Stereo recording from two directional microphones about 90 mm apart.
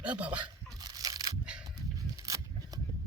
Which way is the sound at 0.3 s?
55° right (ahead or behind).